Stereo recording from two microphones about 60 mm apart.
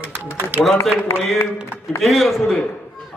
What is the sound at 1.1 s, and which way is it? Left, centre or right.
Speech, left.